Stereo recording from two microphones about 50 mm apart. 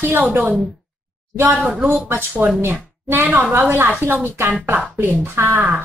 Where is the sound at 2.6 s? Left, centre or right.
Right.